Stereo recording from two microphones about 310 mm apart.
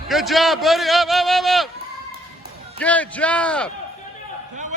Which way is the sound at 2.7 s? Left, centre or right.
Centre.